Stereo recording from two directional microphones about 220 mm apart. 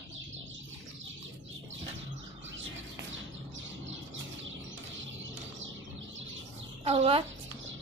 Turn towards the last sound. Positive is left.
turn(degrees=-25)  # may be behind; listen again after turning